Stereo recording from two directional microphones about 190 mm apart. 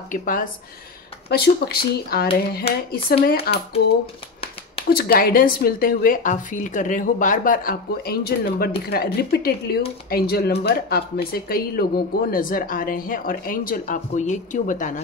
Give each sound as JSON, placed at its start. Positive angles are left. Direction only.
{"t": 0.1, "sound": "speech", "side_deg": 45}
{"t": 4.0, "sound": "shuffling cards", "side_deg": 30}
{"t": 4.8, "sound": "speech", "side_deg": 55}